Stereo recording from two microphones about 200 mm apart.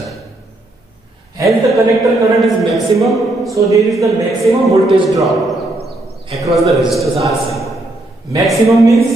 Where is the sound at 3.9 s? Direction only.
Centre (ahead or behind).